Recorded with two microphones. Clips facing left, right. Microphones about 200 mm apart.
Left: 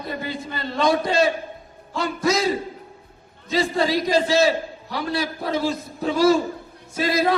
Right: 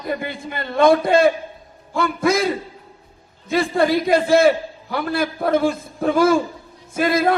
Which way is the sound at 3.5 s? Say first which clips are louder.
Right 3 dB; 55° right (ahead or behind).